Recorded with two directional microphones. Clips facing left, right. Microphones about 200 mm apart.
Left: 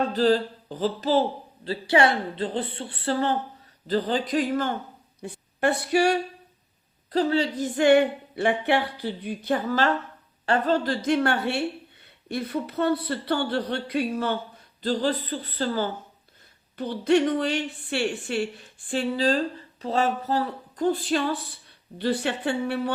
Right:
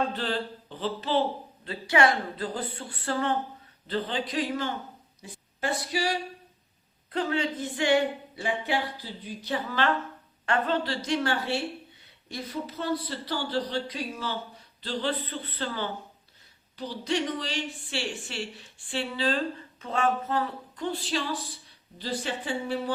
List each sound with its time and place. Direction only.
0.1 s speech: 40° left (ahead or behind)
1.6 s speech: 30° left (ahead or behind); by 4.7 s 50° left (ahead or behind)
5.2 s a woman's voice: 60° left (ahead or behind)
7.1 s a woman's voice: 35° left (ahead or behind)
10.8 s speech: 55° left (ahead or behind)
14.8 s speech: 45° left (ahead or behind)
16.7 s speech: 60° left (ahead or behind)
21.9 s speech: 65° left (ahead or behind)